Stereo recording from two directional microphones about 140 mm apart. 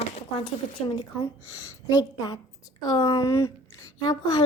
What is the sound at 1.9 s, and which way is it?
A woman's voice, 25° left (ahead or behind).